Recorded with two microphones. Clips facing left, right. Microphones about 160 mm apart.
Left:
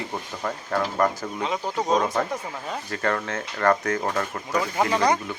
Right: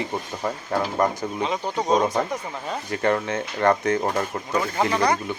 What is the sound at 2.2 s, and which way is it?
Speech, 10° right (ahead or behind).